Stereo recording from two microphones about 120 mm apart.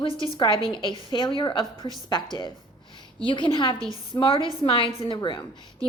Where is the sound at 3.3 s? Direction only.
45° left (ahead or behind).